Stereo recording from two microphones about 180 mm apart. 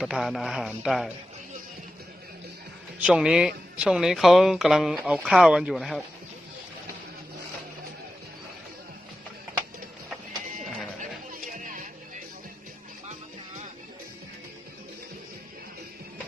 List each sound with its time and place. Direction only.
0.0 s speech: centre (ahead or behind)
3.0 s speech: 5° right (ahead or behind)
11.3 s music: 45° right (ahead or behind)